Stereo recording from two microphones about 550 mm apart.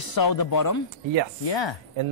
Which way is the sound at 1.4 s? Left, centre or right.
Left.